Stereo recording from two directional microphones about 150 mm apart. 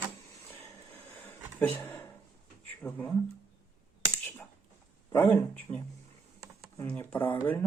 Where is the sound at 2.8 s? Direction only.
10° left (ahead or behind).